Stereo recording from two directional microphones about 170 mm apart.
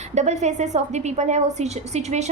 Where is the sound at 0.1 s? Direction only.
40° right (ahead or behind).